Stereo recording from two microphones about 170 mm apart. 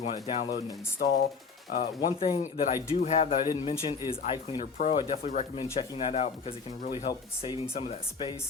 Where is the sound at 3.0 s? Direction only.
40° left (ahead or behind).